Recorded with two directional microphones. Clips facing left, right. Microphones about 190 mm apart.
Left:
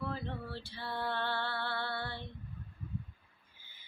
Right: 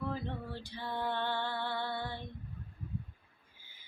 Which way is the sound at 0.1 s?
15° right (ahead or behind).